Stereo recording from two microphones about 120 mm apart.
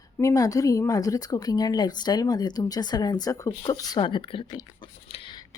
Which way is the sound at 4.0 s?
45° left (ahead or behind).